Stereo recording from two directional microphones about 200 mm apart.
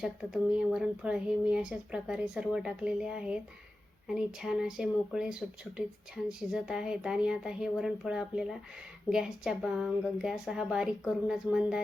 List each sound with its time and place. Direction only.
0.0 s speech: 5° right (ahead or behind)